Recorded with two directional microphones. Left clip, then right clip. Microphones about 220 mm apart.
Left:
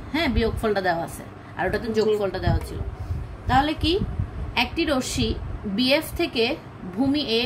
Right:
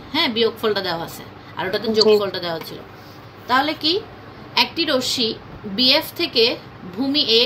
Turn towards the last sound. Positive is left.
turn(degrees=30)  # may be behind; listen again after turning